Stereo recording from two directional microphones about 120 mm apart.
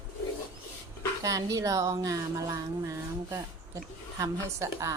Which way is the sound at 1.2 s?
30° right (ahead or behind).